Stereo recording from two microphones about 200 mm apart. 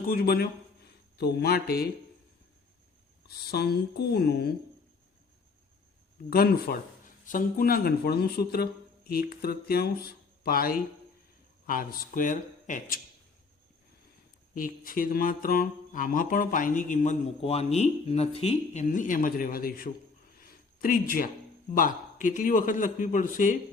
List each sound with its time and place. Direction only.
0.1 s speech: 50° left (ahead or behind)
3.2 s speech: 50° left (ahead or behind)
6.3 s speech: 50° left (ahead or behind)
14.5 s speech: 45° left (ahead or behind)
20.4 s a sound: 45° left (ahead or behind)
21.8 s a man's voice: 40° left (ahead or behind)